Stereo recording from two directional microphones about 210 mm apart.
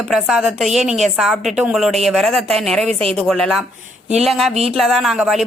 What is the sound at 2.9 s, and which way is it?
Speech, 25° right (ahead or behind).